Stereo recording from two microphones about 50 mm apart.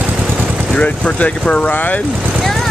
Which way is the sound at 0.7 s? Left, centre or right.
Left.